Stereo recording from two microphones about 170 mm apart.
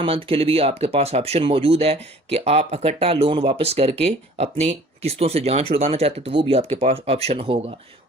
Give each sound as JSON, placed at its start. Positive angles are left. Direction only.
{"t": 0.0, "sound": "speech", "side_deg": -35}